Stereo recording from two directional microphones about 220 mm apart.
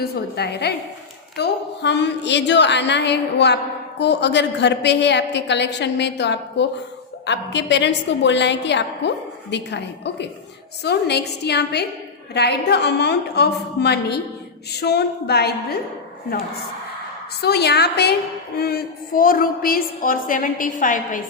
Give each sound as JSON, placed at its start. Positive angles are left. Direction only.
{"t": 0.0, "sound": "a woman's voice", "side_deg": 50}
{"t": 17.4, "sound": "a woman's voice", "side_deg": 50}